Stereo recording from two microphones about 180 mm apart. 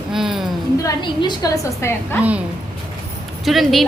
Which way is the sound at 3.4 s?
Centre (ahead or behind).